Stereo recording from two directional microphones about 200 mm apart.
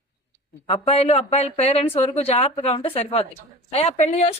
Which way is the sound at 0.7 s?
30° left (ahead or behind).